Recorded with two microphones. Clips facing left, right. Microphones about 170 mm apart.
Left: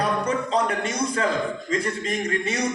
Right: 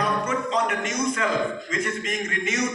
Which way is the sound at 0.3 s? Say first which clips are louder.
Left 2 dB; 35° left (ahead or behind).